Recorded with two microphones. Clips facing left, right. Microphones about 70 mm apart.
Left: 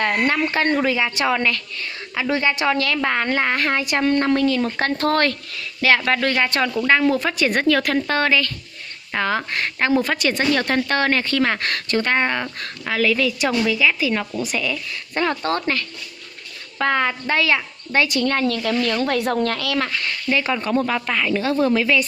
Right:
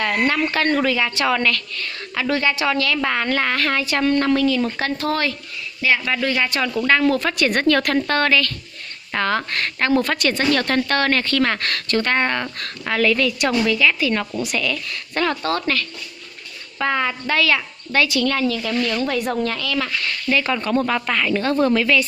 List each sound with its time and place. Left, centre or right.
0.0 s a woman's voice: left
4.7 s speech: left
6.4 s speech: left
6.9 s speech: centre
8.2 s a woman's voice: centre
12.8 s speech: centre
15.2 s a woman's voice: left
16.7 s a woman's voice: left
17.3 s a woman's voice: left
18.5 s speech: left
20.0 s speech: left
20.7 s speech: centre